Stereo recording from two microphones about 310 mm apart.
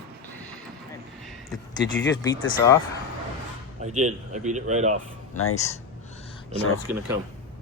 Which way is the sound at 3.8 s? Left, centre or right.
Right.